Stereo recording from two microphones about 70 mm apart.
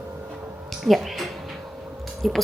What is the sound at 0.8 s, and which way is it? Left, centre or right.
A woman's voice, centre.